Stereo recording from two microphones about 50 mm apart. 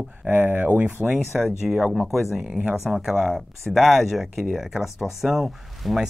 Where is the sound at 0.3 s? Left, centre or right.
Right.